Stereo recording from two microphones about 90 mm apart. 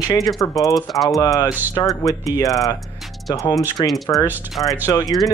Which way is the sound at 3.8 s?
40° left (ahead or behind).